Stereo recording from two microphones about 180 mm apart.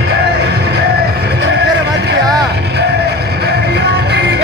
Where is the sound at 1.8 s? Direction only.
65° right (ahead or behind).